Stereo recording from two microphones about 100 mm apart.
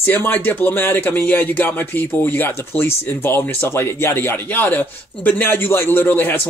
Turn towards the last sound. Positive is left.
turn(degrees=20)  # may be behind; listen again after turning